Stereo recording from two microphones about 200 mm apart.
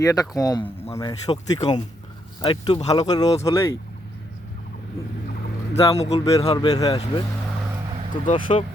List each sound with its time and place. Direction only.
0.0 s speech: 15° left (ahead or behind)
5.7 s speech: 30° left (ahead or behind)
8.3 s speech: 25° left (ahead or behind)